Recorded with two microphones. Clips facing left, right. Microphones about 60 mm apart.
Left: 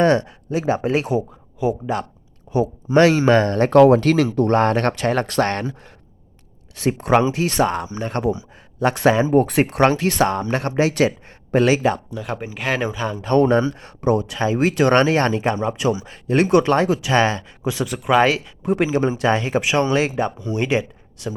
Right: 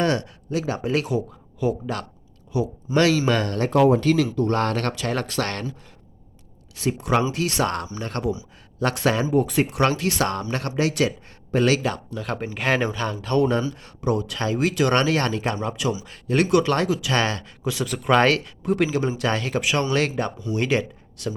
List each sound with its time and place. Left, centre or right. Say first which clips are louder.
0.0 s speech: left 6 dB; left
2.5 s speech: left 5 dB; left
3.7 s speech: left 5 dB; left
4.5 s speech: left 6 dB; left
6.7 s speech: left 5 dB; left
7.6 s speech: left 7 dB; centre
9.2 s speech: left 4 dB; left
10.2 s speech: left 5 dB; left
12.1 s speech: left 1 dB; centre
13.2 s speech: left 6 dB; left
16.0 s speech: left 3 dB; left
18.6 s speech: left 5 dB; left